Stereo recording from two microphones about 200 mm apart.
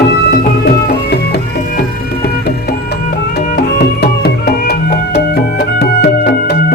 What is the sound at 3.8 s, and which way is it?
Music, 50° left (ahead or behind).